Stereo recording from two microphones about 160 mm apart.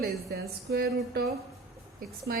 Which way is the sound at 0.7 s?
75° right (ahead or behind).